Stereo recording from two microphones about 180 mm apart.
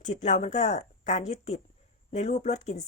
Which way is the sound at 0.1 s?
40° left (ahead or behind).